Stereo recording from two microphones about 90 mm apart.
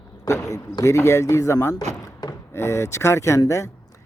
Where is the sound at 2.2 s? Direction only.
45° left (ahead or behind).